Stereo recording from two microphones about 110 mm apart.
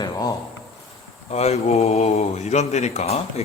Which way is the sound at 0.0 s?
35° left (ahead or behind).